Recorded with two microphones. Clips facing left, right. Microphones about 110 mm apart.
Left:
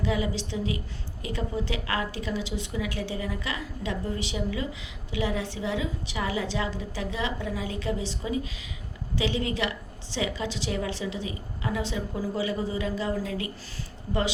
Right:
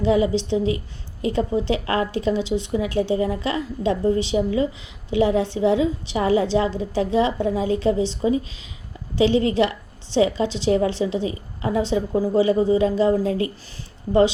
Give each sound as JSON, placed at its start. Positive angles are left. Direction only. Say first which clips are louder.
{"t": 0.0, "sound": "a woman's voice", "louder": "right 10 dB", "side_deg": -30}